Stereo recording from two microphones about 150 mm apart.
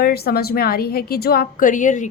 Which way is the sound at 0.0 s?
90° left.